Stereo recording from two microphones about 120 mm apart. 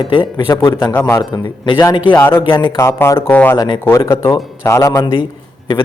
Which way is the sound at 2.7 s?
25° left (ahead or behind).